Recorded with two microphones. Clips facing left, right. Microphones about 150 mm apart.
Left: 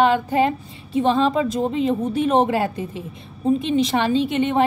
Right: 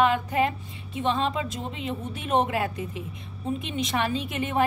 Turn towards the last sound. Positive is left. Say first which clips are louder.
# left 8 dB
turn(degrees=30)  # may be behind; listen again after turning